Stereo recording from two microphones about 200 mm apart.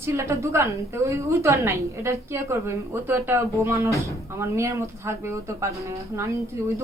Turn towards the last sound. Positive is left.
turn(degrees=-15)  # may be behind; listen again after turning